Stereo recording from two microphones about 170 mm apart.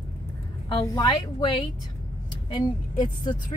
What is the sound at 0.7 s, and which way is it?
Speech, 30° left (ahead or behind).